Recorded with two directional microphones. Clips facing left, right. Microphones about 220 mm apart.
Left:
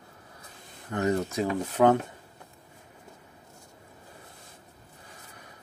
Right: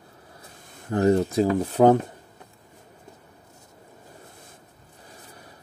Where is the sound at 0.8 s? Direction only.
35° right (ahead or behind).